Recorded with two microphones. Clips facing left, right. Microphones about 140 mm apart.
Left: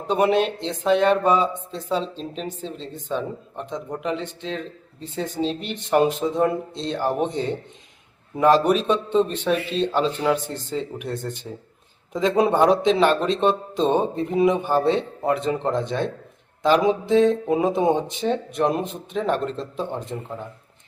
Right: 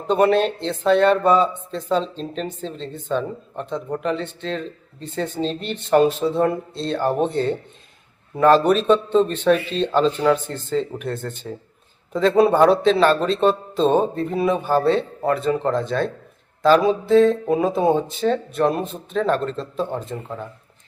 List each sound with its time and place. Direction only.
0.1 s speech: 10° left (ahead or behind)